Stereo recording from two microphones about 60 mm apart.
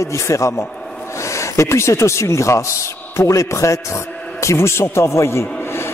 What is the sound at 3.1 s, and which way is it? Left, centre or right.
Music, left.